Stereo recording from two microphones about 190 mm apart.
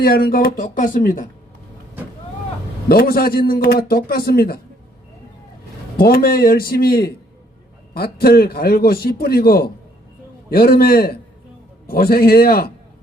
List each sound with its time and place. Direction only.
0.0 s a man's voice: 50° left (ahead or behind)
2.9 s a man's voice: 50° left (ahead or behind)
6.0 s a man's voice: 50° left (ahead or behind)